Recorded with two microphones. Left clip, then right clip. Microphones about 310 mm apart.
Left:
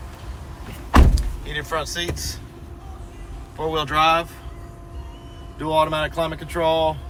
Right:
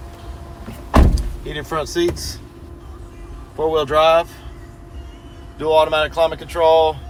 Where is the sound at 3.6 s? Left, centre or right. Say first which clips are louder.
Right 4 dB; right.